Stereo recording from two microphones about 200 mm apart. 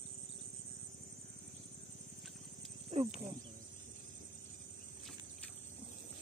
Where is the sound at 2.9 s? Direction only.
30° right (ahead or behind).